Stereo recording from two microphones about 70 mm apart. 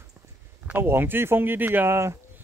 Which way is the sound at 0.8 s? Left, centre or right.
Right.